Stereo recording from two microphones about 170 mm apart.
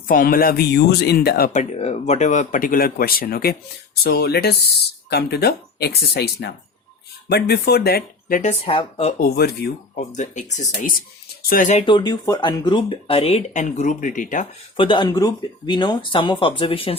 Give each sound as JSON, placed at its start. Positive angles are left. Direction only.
{"t": 0.1, "sound": "speech", "side_deg": 55}
{"t": 1.5, "sound": "speech", "side_deg": 40}
{"t": 8.4, "sound": "speech", "side_deg": 35}
{"t": 9.2, "sound": "speech", "side_deg": 65}
{"t": 10.2, "sound": "speech", "side_deg": 45}
{"t": 11.9, "sound": "speech", "side_deg": 25}
{"t": 13.5, "sound": "speech", "side_deg": 45}
{"t": 14.8, "sound": "speech", "side_deg": 30}